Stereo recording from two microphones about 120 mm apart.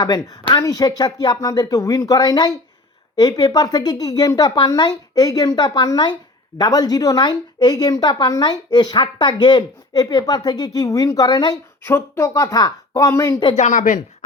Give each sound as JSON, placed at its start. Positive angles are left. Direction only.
{"t": 0.0, "sound": "a woman's voice", "side_deg": 30}
{"t": 11.8, "sound": "a woman's voice", "side_deg": 20}
{"t": 13.6, "sound": "speech", "side_deg": 90}